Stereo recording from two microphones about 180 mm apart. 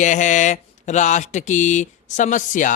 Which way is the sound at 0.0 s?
45° left (ahead or behind).